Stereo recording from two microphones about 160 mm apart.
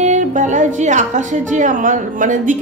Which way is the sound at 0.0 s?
50° right (ahead or behind).